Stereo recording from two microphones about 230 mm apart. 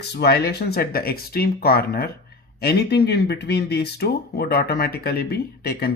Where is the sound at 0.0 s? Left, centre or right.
Left.